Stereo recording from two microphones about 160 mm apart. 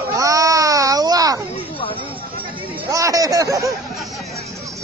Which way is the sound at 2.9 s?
20° right (ahead or behind).